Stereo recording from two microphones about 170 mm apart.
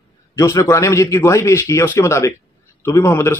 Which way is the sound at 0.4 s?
20° left (ahead or behind).